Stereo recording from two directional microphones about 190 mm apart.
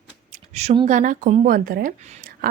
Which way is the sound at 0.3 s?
35° right (ahead or behind).